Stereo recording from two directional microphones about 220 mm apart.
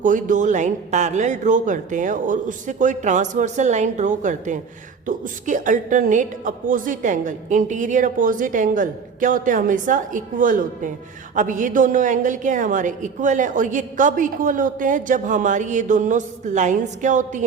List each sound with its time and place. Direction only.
0.0 s a woman's voice: 35° right (ahead or behind)